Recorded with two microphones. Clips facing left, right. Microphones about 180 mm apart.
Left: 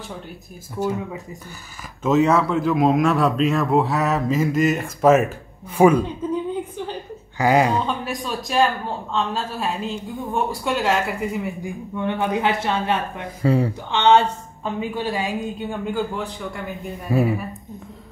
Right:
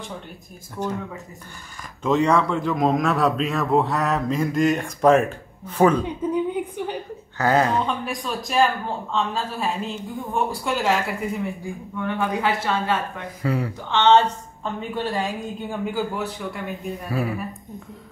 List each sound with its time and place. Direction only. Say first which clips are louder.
0.7 s a man's voice: left 3 dB; 10° left (ahead or behind)
6.3 s a sound: even; 15° right (ahead or behind)
7.3 s speech: left 2 dB; 10° left (ahead or behind)
7.8 s a man's voice: left 1 dB; centre (ahead or behind)
11.6 s speech: left 3 dB; 20° left (ahead or behind)
13.8 s a man's voice: right 1 dB; 15° left (ahead or behind); by 16.7 s 5° right (ahead or behind)
17.1 s speech: left 6 dB; 20° left (ahead or behind)